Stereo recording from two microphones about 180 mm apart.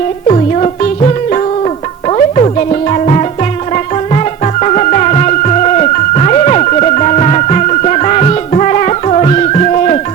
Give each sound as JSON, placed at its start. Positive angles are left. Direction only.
{"t": 0.3, "sound": "music", "side_deg": 35}